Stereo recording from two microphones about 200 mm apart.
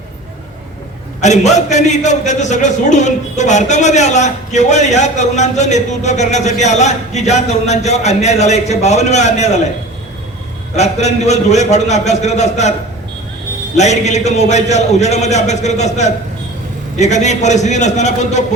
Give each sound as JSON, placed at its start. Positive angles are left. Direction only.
{"t": 1.2, "sound": "a man's voice", "side_deg": 35}
{"t": 10.8, "sound": "a man's voice", "side_deg": 35}
{"t": 13.7, "sound": "a man's voice", "side_deg": 35}